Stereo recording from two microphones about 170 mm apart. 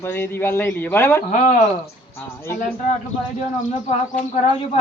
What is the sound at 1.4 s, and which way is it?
Speech, 45° left (ahead or behind).